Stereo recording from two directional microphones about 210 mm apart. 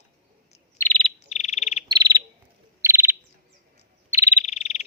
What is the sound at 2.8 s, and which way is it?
Bird, 10° right (ahead or behind).